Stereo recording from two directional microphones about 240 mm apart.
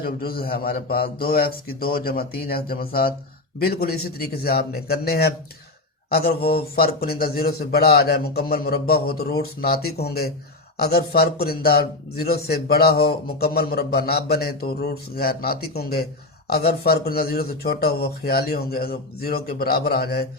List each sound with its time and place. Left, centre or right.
0.0 s a man's voice: left